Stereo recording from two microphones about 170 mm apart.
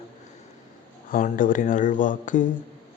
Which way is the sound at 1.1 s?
50° left (ahead or behind).